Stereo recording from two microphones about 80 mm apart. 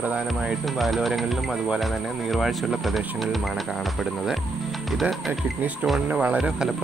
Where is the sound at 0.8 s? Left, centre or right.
Centre.